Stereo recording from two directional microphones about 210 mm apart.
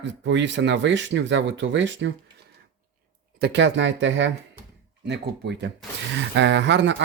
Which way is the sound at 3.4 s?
55° right (ahead or behind).